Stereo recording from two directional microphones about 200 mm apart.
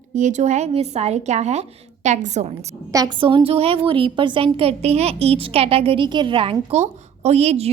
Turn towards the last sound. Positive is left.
turn(degrees=-30)  # may be behind; listen again after turning